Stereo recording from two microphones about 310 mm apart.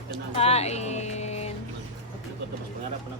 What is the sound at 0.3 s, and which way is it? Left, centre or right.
Speech, centre.